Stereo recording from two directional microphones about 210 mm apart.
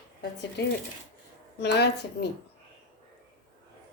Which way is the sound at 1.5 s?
55° left (ahead or behind).